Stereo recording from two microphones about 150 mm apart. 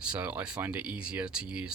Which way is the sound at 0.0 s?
10° right (ahead or behind).